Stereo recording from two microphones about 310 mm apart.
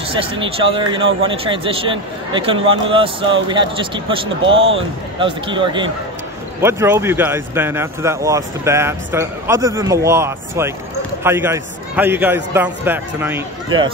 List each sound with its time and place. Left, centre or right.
0.1 s speech: centre